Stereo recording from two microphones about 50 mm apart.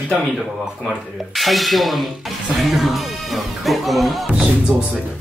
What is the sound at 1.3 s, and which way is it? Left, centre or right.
Speech, centre.